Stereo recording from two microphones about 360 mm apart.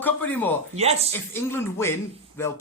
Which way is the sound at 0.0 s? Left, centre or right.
Centre.